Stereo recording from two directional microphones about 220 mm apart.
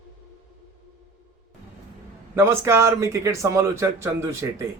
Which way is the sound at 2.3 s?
10° right (ahead or behind).